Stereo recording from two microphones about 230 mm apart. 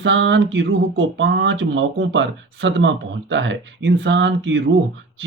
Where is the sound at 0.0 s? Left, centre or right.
Right.